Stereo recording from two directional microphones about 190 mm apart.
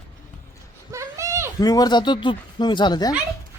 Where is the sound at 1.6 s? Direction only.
20° left (ahead or behind).